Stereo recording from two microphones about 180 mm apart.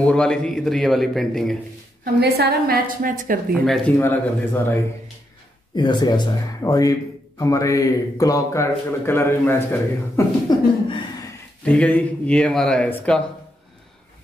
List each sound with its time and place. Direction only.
0.0 s speech: 5° left (ahead or behind)
2.1 s a woman's voice: 60° right (ahead or behind)
3.5 s speech: centre (ahead or behind)
4.0 s speech: 10° left (ahead or behind)
5.8 s speech: 25° left (ahead or behind)
10.5 s chuckle: 20° left (ahead or behind)
11.6 s speech: 5° left (ahead or behind)